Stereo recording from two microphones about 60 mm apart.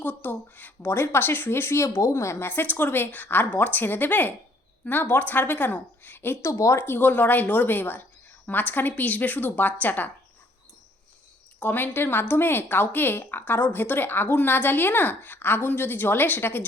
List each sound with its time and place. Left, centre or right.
0.0 s speech: left
0.9 s speech: left
2.5 s speech: left
6.4 s speech: left
6.8 s speech: left
11.6 s speech: left